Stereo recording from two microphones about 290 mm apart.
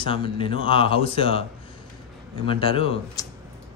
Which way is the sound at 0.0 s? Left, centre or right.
Centre.